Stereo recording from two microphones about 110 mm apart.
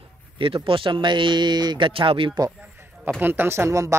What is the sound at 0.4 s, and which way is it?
Speech, 55° right (ahead or behind).